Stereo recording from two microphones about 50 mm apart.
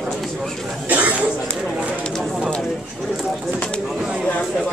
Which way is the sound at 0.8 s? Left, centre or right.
Right.